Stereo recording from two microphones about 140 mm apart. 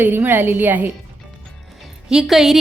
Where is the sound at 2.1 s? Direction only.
5° right (ahead or behind).